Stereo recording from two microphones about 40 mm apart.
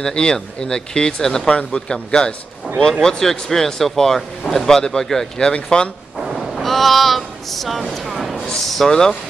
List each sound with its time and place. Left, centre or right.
0.0 s speech: left
1.5 s speech: left
5.4 s speech: left
6.5 s speech: centre
8.1 s a sound: centre
8.6 s speech: centre